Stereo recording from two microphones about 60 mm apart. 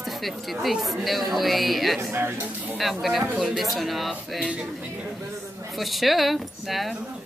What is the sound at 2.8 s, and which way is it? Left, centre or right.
A woman's voice, centre.